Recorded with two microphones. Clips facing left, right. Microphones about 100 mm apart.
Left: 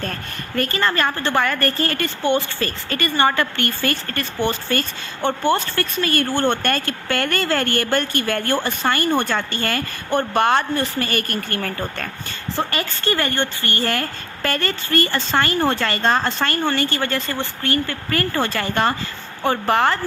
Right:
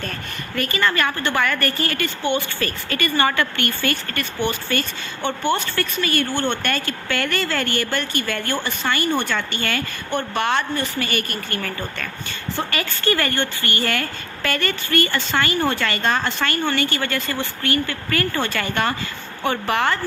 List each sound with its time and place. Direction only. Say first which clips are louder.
0.0 s speech: left 2 dB; 40° left (ahead or behind)
12.5 s speech: left 2 dB; 25° left (ahead or behind)